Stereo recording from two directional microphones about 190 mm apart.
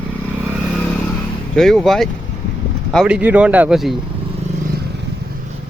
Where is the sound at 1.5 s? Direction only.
Centre (ahead or behind).